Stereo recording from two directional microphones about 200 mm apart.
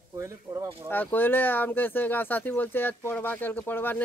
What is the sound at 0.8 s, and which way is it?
Speech, 10° left (ahead or behind).